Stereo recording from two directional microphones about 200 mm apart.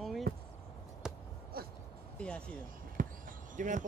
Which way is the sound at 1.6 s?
50° right (ahead or behind).